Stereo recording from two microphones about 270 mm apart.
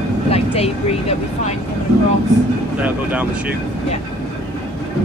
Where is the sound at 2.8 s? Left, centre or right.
Centre.